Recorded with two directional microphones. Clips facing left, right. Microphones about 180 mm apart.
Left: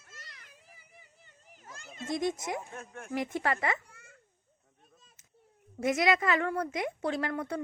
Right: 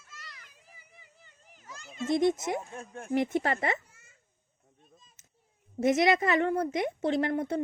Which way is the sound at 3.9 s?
60° left (ahead or behind).